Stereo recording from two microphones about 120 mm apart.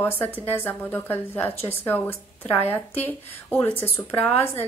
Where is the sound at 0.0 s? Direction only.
15° left (ahead or behind).